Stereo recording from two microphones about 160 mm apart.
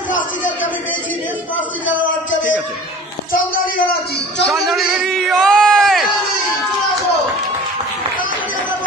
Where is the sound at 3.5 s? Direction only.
65° left (ahead or behind).